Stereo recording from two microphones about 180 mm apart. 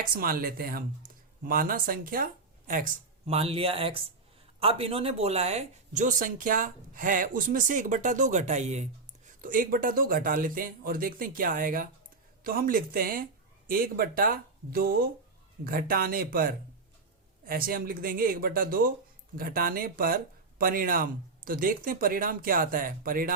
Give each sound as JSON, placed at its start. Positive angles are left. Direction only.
{"t": 0.0, "sound": "speech", "side_deg": -55}
{"t": 3.2, "sound": "speech", "side_deg": -35}